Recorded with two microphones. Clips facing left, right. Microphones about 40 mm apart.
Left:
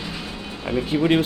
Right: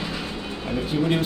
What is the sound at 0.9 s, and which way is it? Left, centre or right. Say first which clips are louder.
Speech: left 3 dB; left.